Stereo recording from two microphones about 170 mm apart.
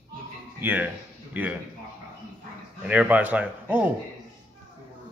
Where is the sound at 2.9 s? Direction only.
10° right (ahead or behind).